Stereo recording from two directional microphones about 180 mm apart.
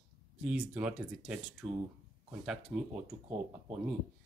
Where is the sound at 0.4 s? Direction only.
5° right (ahead or behind).